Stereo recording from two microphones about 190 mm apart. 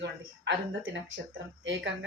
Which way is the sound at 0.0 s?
70° right (ahead or behind).